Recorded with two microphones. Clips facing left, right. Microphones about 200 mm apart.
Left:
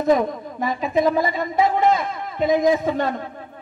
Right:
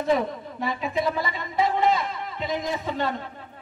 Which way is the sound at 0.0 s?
45° left (ahead or behind).